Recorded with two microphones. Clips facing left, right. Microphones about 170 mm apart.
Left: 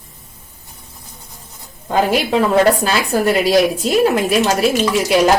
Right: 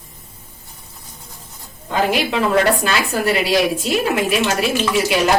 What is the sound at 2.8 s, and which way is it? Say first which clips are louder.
A woman's voice: left 3 dB; 40° left (ahead or behind).